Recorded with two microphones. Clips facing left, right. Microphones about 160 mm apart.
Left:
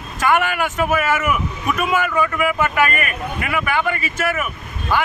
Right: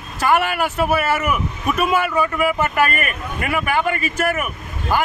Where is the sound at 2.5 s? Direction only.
40° right (ahead or behind).